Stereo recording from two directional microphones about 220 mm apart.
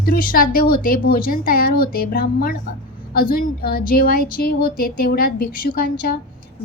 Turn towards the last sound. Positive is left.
turn(degrees=40)  # may be behind; listen again after turning